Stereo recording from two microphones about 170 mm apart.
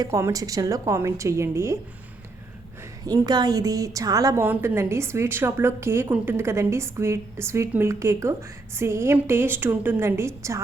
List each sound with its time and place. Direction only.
0.0 s a woman's voice: 15° right (ahead or behind)
3.1 s a woman's voice: 25° right (ahead or behind)